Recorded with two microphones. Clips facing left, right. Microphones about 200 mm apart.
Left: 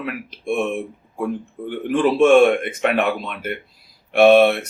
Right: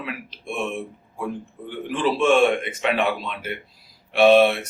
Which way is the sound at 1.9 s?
55° left (ahead or behind).